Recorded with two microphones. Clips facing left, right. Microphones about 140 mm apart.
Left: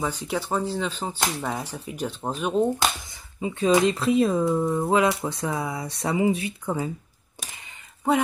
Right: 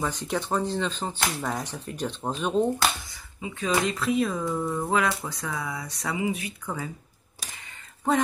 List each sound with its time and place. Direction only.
0.0 s speech: 10° left (ahead or behind)
3.3 s speech: 30° left (ahead or behind)
8.1 s speech: 10° left (ahead or behind)